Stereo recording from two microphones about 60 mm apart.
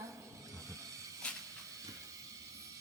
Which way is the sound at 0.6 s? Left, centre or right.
Right.